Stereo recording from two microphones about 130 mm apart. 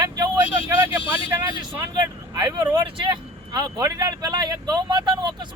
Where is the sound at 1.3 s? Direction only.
30° right (ahead or behind).